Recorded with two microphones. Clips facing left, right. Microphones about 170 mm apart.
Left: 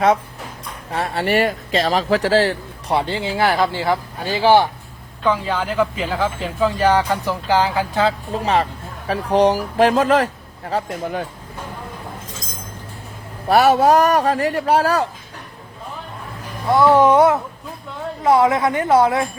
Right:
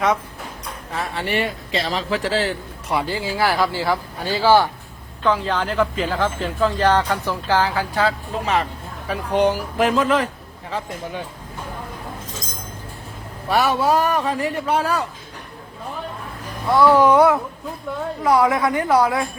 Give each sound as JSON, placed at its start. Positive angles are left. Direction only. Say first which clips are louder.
{"t": 0.9, "sound": "speech", "louder": "left 5 dB", "side_deg": 35}
{"t": 13.5, "sound": "speech", "louder": "left 5 dB", "side_deg": 40}
{"t": 14.3, "sound": "speech", "louder": "left 3 dB", "side_deg": 90}
{"t": 14.7, "sound": "speech", "louder": "left 5 dB", "side_deg": 40}
{"t": 16.6, "sound": "speech", "louder": "left 1 dB", "side_deg": 20}